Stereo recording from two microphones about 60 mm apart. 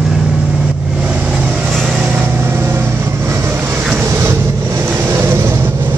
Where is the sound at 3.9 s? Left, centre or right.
Right.